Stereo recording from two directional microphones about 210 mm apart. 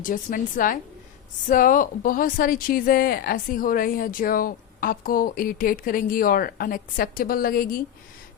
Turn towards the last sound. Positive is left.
turn(degrees=45)  # may be behind; listen again after turning